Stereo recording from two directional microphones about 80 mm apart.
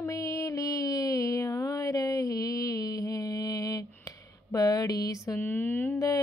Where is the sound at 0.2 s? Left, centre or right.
Left.